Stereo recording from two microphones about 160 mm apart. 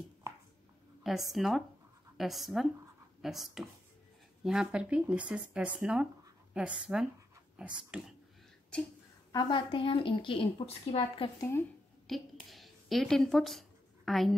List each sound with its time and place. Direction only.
1.0 s speech: centre (ahead or behind)
9.3 s a woman's voice: 30° left (ahead or behind)
12.1 s a woman's voice: centre (ahead or behind)